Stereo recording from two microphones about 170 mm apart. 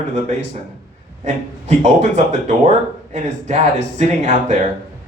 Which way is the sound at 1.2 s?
40° right (ahead or behind).